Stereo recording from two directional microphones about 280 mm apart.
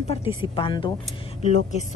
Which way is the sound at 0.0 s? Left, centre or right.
Left.